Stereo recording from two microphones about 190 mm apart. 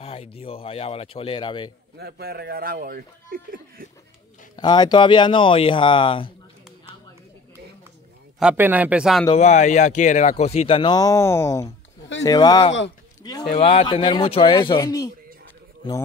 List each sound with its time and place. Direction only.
0.0 s speech: 30° left (ahead or behind)
2.0 s speech: 55° right (ahead or behind)
4.6 s speech: 20° left (ahead or behind)
8.4 s speech: 5° right (ahead or behind)
9.4 s a man's voice: 40° left (ahead or behind); by 12.7 s 20° left (ahead or behind)
13.2 s a sound: 20° left (ahead or behind)
13.5 s speech: 30° left (ahead or behind)